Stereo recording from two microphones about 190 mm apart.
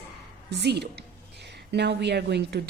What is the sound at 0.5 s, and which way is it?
Speech, 60° right (ahead or behind).